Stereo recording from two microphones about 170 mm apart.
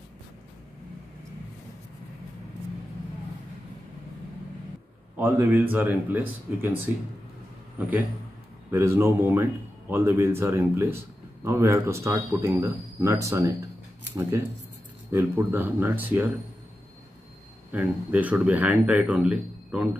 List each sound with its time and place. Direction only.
5.1 s speech: 10° right (ahead or behind)
8.6 s speech: 15° right (ahead or behind)
15.0 s speech: 15° right (ahead or behind)
17.6 s speech: 10° right (ahead or behind)